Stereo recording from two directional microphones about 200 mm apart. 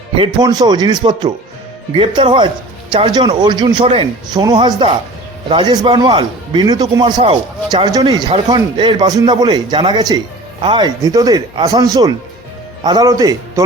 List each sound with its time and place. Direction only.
0.2 s speech: 20° right (ahead or behind)